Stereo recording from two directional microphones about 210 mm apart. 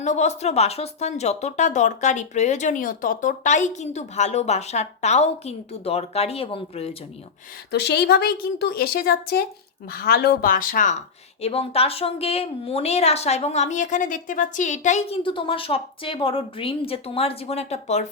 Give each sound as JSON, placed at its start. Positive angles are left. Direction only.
{"t": 0.0, "sound": "a woman's voice", "side_deg": 35}
{"t": 7.7, "sound": "speech", "side_deg": 55}
{"t": 11.3, "sound": "a woman's voice", "side_deg": 30}